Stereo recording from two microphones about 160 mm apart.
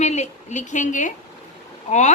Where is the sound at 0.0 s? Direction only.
45° left (ahead or behind).